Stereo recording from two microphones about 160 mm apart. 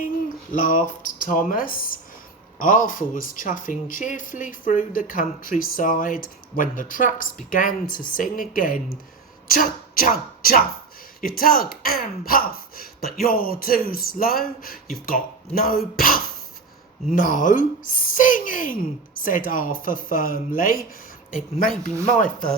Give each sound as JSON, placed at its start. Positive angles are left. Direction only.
{"t": 0.5, "sound": "speech", "side_deg": 55}